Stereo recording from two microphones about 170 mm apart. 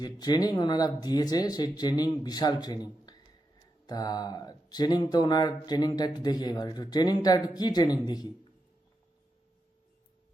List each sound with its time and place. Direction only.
0.0 s speech: 25° left (ahead or behind)